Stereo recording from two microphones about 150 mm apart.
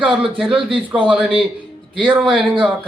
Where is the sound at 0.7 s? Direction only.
35° right (ahead or behind).